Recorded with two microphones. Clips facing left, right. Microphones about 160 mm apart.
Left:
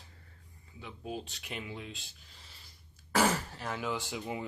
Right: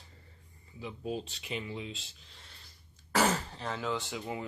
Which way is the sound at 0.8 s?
Centre (ahead or behind).